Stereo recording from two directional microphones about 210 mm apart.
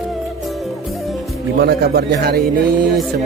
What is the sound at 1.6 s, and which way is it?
Speech, 50° right (ahead or behind).